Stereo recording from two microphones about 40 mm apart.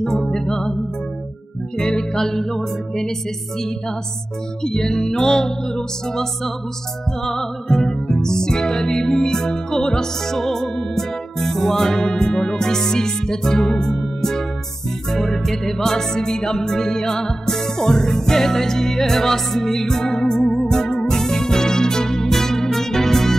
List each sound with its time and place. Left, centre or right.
0.0 s music: centre
1.8 s music: centre
4.6 s music: centre